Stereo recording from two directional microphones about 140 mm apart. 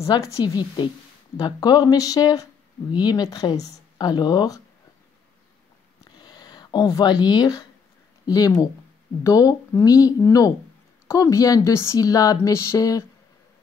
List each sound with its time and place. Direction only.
0.0 s a woman's voice: 25° left (ahead or behind)
6.1 s a sound: 30° left (ahead or behind)
8.3 s a woman's voice: 25° left (ahead or behind)